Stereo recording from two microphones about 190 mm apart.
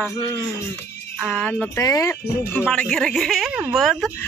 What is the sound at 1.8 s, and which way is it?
A man's voice, 15° left (ahead or behind).